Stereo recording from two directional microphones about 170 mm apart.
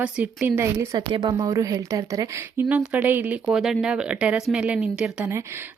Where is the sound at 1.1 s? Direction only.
25° right (ahead or behind); by 5.3 s 5° right (ahead or behind).